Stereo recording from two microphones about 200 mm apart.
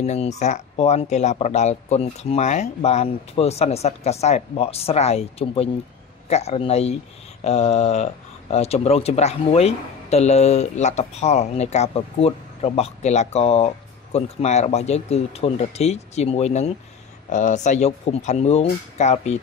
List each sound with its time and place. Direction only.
0.0 s speech: 35° left (ahead or behind)